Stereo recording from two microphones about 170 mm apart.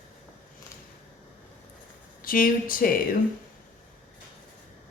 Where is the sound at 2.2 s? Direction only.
55° left (ahead or behind).